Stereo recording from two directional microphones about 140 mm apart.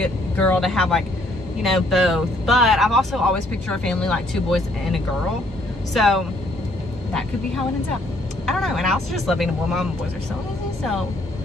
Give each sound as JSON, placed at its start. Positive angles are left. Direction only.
{"t": 0.0, "sound": "speech", "side_deg": 5}